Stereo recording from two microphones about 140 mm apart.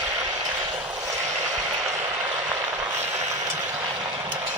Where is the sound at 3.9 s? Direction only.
25° right (ahead or behind).